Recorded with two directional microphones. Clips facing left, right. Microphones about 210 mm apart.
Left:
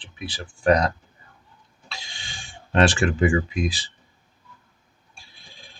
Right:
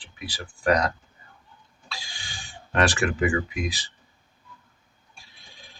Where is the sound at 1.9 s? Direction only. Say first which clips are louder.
Even; 25° left (ahead or behind).